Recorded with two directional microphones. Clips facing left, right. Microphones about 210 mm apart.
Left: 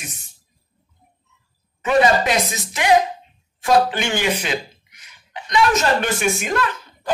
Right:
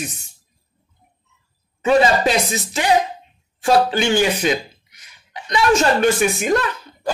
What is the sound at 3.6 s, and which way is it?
A woman's voice, 40° right (ahead or behind).